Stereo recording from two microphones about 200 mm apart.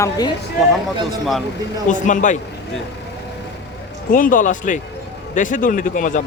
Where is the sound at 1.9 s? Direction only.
40° left (ahead or behind).